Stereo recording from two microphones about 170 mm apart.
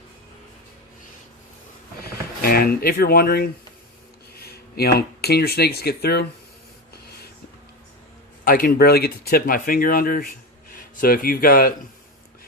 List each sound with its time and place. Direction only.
2.0 s speech: 60° left (ahead or behind)
8.4 s a man's voice: 55° left (ahead or behind)